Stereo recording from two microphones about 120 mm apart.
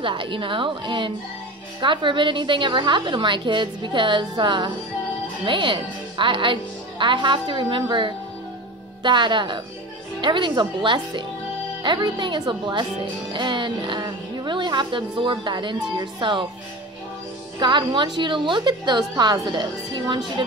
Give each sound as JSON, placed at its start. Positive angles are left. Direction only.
{"t": 0.0, "sound": "a woman's voice", "side_deg": -45}
{"t": 17.6, "sound": "speech", "side_deg": -40}